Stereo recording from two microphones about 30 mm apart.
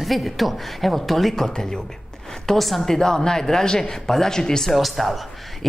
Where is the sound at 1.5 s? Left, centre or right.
Left.